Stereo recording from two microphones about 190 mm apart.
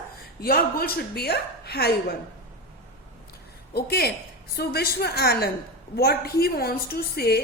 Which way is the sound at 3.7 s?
55° left (ahead or behind).